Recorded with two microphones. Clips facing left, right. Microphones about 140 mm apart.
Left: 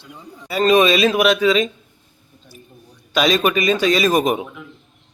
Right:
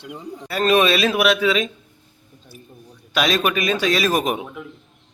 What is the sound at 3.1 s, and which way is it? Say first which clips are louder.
A man's voice: left 3 dB; centre (ahead or behind).